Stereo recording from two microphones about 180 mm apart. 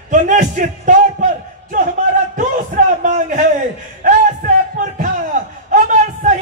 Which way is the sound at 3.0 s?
40° right (ahead or behind).